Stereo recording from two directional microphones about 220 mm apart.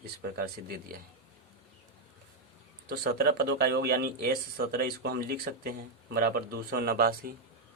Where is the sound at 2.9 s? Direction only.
45° right (ahead or behind).